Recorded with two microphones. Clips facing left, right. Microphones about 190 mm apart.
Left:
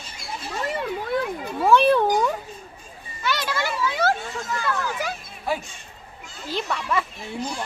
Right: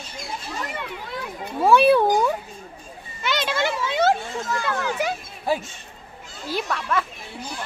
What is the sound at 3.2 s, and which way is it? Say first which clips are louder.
Children playing: right 2 dB; 20° right (ahead or behind).